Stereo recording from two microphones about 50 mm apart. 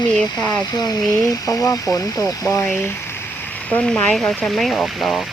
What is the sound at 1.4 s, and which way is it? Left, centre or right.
Speech, left.